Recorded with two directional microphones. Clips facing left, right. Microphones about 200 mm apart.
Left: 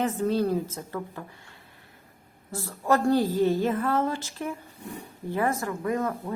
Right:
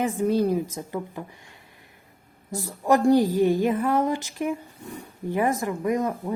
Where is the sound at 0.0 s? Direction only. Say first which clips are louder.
Right 3 dB; 10° right (ahead or behind).